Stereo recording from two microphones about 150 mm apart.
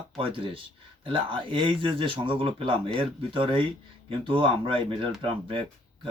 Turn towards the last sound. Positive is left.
turn(degrees=-35)  # may be behind; listen again after turning